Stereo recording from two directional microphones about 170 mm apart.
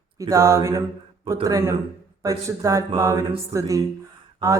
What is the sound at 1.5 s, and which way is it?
Speech, 20° right (ahead or behind).